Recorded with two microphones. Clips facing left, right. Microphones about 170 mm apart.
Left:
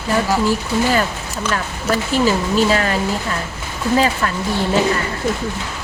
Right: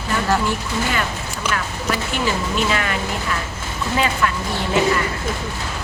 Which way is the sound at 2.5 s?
35° left (ahead or behind).